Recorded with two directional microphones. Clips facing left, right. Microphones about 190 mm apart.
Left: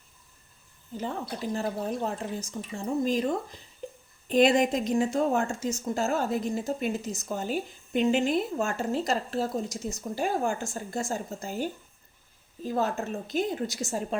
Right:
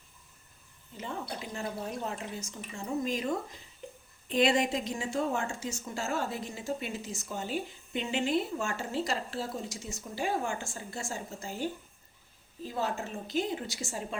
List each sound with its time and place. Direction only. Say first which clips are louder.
0.9 s a woman's voice: left 5 dB; 40° left (ahead or behind)
4.3 s a woman's voice: left 5 dB; 45° left (ahead or behind)
12.6 s a woman's voice: left 5 dB; 45° left (ahead or behind)